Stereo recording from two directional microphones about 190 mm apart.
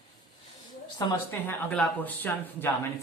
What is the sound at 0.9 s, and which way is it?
Speech, 15° left (ahead or behind).